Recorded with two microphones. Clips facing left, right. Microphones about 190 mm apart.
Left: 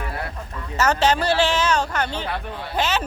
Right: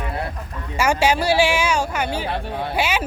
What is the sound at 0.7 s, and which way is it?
Speech, 10° right (ahead or behind).